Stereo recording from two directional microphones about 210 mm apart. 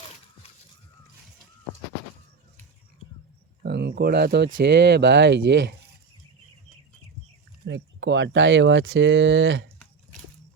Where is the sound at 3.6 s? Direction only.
50° right (ahead or behind).